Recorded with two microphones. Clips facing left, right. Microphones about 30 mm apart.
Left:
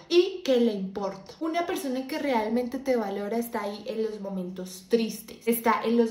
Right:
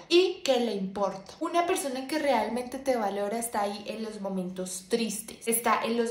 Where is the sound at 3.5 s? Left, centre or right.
Right.